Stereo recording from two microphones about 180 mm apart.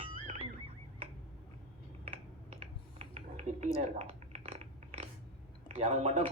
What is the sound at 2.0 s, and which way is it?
Finger snapping, 40° right (ahead or behind).